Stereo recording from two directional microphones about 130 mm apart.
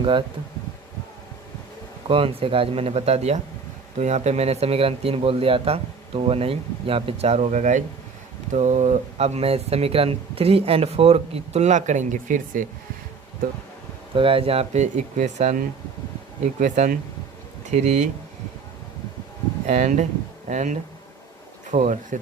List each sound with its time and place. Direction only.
0.0 s speech: 40° right (ahead or behind)
2.0 s speech: 45° right (ahead or behind); by 12.6 s 85° right
14.2 s speech: 45° right (ahead or behind); by 18.1 s 65° right (ahead or behind)
19.6 s speech: 60° right (ahead or behind)